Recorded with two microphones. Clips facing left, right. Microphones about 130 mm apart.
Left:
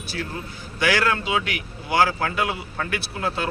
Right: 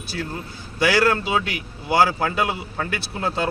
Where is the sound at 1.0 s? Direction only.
35° right (ahead or behind).